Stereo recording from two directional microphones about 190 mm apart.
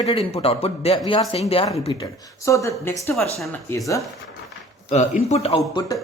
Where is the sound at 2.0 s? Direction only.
15° left (ahead or behind).